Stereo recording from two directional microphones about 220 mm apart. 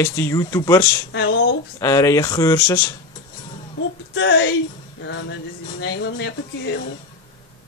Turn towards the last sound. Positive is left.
turn(degrees=50)  # may be behind; listen again after turning